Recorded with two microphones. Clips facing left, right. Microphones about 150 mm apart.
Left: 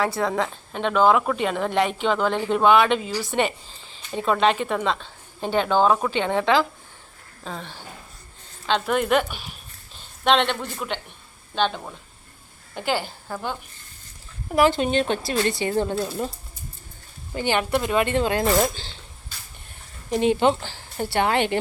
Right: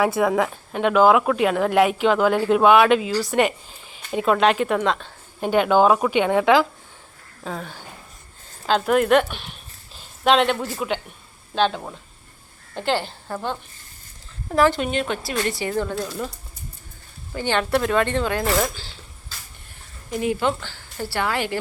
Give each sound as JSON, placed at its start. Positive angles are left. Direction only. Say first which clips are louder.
{"t": 0.0, "sound": "a woman's voice", "louder": "right 4 dB", "side_deg": -10}
{"t": 14.8, "sound": "speech", "louder": "left 2 dB", "side_deg": 30}
{"t": 17.3, "sound": "speech", "louder": "right 1 dB", "side_deg": 15}
{"t": 20.1, "sound": "speech", "louder": "left 3 dB", "side_deg": 25}